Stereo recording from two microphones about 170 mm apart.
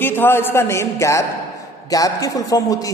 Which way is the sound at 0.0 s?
10° left (ahead or behind).